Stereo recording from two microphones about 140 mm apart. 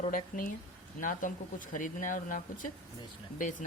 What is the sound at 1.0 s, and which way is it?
Speech, 70° left (ahead or behind).